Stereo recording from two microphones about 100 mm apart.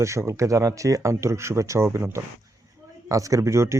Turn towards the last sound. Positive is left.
turn(degrees=-30)  # may be behind; listen again after turning